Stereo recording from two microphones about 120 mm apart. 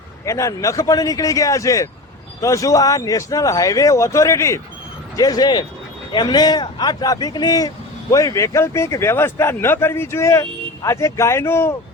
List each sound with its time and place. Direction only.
0.3 s a man's voice: 25° left (ahead or behind)